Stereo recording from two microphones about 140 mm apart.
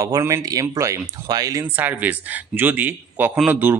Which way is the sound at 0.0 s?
20° right (ahead or behind).